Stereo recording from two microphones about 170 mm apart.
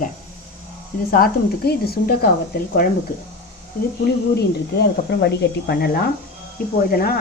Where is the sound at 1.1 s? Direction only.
65° left (ahead or behind).